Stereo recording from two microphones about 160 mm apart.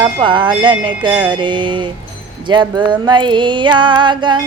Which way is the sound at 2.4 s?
25° right (ahead or behind).